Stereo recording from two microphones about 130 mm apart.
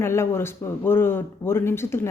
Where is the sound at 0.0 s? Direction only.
20° left (ahead or behind).